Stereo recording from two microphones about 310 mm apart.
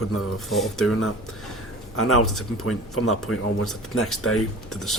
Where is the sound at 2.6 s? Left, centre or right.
Left.